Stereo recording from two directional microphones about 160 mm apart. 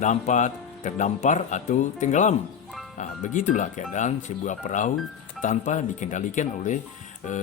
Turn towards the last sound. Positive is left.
turn(degrees=50)  # may be behind; listen again after turning